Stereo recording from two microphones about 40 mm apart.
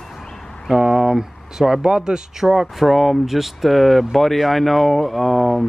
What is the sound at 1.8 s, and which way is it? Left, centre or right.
Speech, right.